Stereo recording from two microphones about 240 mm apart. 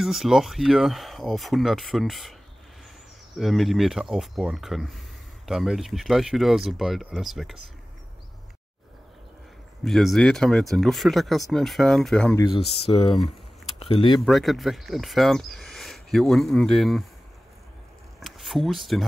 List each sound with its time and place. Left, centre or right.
0.0 s speech: centre
3.3 s speech: centre
9.8 s speech: centre
12.4 s speech: centre
14.2 s speech: centre
18.2 s speech: centre